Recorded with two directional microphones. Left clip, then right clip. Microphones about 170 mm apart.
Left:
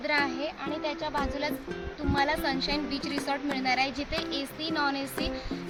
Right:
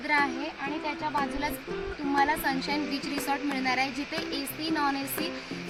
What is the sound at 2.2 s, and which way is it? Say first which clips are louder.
Speech: right 1 dB; 30° left (ahead or behind).